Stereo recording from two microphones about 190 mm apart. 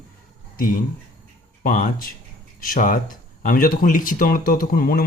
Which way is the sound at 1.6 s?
45° left (ahead or behind).